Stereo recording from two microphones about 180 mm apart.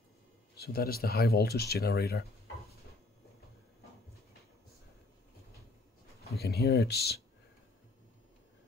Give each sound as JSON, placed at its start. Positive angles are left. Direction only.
{"t": 0.6, "sound": "speech", "side_deg": 55}
{"t": 6.2, "sound": "speech", "side_deg": 60}